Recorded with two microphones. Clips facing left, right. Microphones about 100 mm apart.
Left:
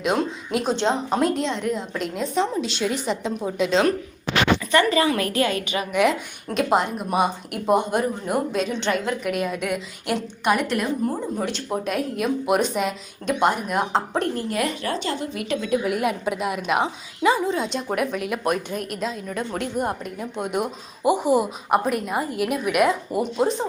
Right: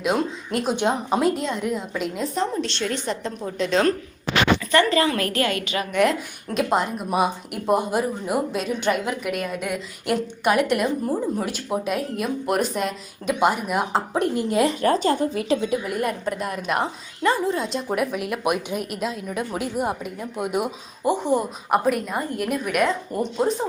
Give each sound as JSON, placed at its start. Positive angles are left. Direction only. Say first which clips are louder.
{"t": 0.0, "sound": "a woman's voice", "louder": "even", "side_deg": 0}
{"t": 5.9, "sound": "speech", "louder": "even", "side_deg": 0}
{"t": 14.3, "sound": "a woman's voice", "louder": "right 4 dB", "side_deg": -25}
{"t": 14.8, "sound": "a woman's voice", "louder": "right 7 dB", "side_deg": -40}
{"t": 15.4, "sound": "a woman's voice", "louder": "right 4 dB", "side_deg": -30}
{"t": 15.7, "sound": "speech", "louder": "left 2 dB", "side_deg": 0}
{"t": 21.1, "sound": "speech", "louder": "left 2 dB", "side_deg": 10}